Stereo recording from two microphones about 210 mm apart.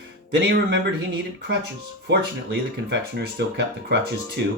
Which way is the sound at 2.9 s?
55° right (ahead or behind).